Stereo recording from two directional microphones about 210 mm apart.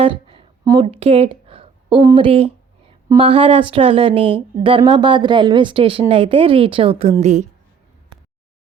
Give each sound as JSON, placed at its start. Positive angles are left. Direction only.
{"t": 0.0, "sound": "speech", "side_deg": -25}